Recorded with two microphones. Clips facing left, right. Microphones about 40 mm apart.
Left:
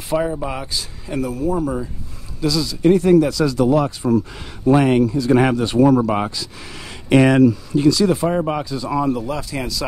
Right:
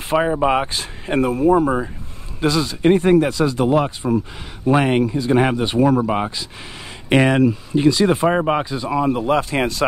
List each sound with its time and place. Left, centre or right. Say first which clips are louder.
0.1 s speech: right 4 dB; right
5.9 s speech: left 1 dB; centre
7.4 s speech: left 1 dB; right
9.2 s speech: right 7 dB; right